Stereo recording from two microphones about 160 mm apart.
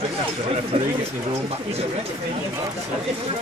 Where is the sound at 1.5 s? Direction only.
40° right (ahead or behind).